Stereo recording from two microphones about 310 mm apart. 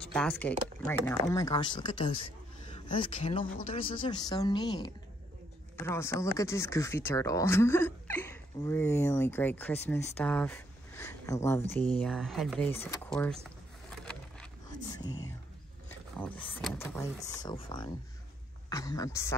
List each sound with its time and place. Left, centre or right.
0.0 s speech: centre
13.8 s whispering: centre
16.2 s speech: centre